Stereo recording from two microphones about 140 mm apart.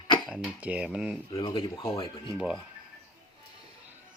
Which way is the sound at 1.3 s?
40° left (ahead or behind).